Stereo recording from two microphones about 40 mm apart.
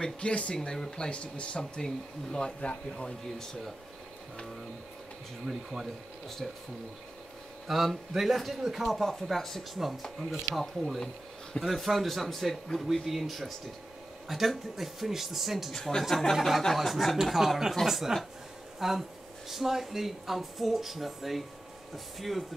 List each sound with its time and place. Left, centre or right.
0.0 s speech: left
0.6 s speech: centre
5.5 s a man's voice: centre
6.2 s speech: centre
7.6 s a man's voice: centre
15.7 s a man's voice: centre